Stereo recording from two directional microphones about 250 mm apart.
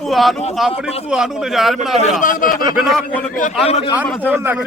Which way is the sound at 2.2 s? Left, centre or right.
Left.